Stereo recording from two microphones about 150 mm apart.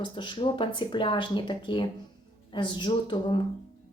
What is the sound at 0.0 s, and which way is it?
Speech, 35° left (ahead or behind).